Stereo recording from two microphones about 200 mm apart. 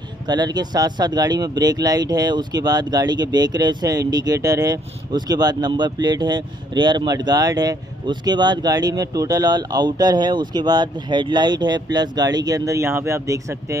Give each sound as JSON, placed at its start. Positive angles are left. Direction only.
{"t": 0.3, "sound": "speech", "side_deg": -20}